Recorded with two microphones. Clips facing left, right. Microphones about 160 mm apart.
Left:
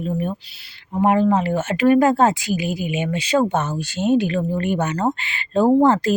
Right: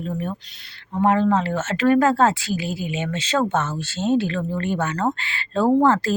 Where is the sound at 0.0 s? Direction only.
15° left (ahead or behind).